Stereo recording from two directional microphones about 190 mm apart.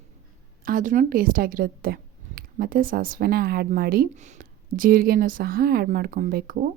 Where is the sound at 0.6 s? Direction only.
45° right (ahead or behind).